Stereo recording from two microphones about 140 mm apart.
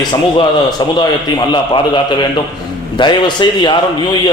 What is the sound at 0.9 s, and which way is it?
A man's voice, 35° left (ahead or behind).